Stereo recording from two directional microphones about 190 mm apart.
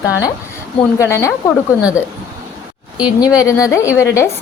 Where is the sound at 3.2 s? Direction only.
20° left (ahead or behind).